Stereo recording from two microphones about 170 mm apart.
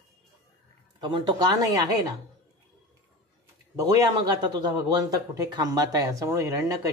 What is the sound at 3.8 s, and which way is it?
Speech, 20° right (ahead or behind).